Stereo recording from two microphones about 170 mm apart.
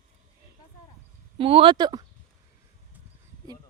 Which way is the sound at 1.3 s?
30° right (ahead or behind).